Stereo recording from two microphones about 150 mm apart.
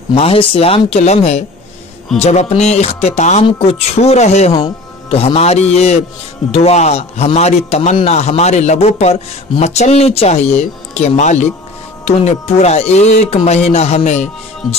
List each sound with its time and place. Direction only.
0.1 s a man's voice: 40° left (ahead or behind)